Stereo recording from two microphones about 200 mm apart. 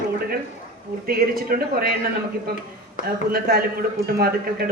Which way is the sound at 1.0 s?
50° right (ahead or behind).